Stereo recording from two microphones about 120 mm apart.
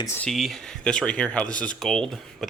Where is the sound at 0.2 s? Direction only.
Centre (ahead or behind).